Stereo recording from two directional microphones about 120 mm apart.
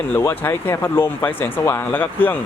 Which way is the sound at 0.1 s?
20° left (ahead or behind).